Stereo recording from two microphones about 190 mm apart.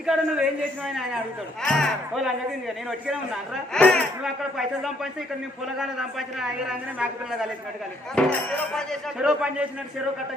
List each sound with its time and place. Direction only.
0.0 s speech: 5° right (ahead or behind)
1.6 s speech: centre (ahead or behind)
8.1 s speech: 5° left (ahead or behind)